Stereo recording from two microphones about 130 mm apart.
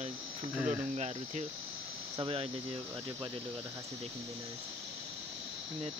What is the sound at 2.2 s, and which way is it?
Speech, 45° right (ahead or behind).